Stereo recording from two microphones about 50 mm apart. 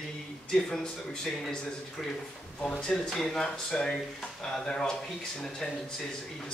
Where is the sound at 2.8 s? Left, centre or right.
Centre.